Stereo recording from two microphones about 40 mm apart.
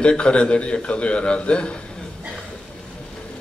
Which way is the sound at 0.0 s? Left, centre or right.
Left.